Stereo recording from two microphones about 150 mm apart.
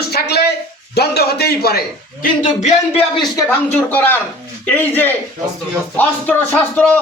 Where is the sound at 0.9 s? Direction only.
90° left.